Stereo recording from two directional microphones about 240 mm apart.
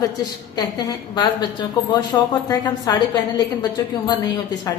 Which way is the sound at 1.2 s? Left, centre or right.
Centre.